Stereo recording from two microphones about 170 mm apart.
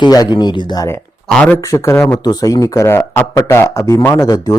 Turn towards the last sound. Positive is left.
turn(degrees=20)  # may be behind; listen again after turning